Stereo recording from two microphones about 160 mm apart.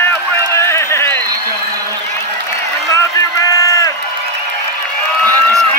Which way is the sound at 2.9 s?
20° left (ahead or behind).